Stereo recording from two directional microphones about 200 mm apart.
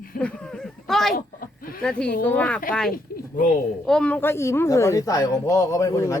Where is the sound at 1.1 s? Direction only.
45° left (ahead or behind).